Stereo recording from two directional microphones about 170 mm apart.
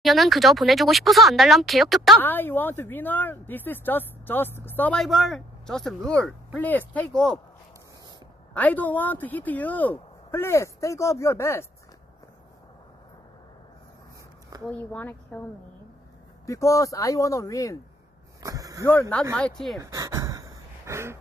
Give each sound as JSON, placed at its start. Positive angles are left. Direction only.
{"t": 0.0, "sound": "speech", "side_deg": 0}
{"t": 2.2, "sound": "speech", "side_deg": 10}
{"t": 8.5, "sound": "speech", "side_deg": 10}
{"t": 14.7, "sound": "speech", "side_deg": 10}
{"t": 16.4, "sound": "speech", "side_deg": 20}
{"t": 18.4, "sound": "a sound", "side_deg": -20}
{"t": 18.9, "sound": "speech", "side_deg": 10}
{"t": 19.8, "sound": "a sound", "side_deg": -20}